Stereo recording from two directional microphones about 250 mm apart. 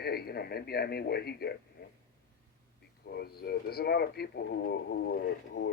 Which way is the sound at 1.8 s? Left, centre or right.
Left.